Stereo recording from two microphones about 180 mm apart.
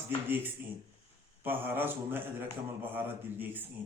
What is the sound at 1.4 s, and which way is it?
Speech, 10° right (ahead or behind).